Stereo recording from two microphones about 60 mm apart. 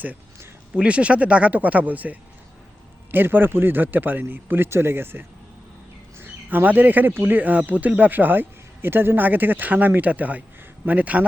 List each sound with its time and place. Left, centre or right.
0.8 s speech: centre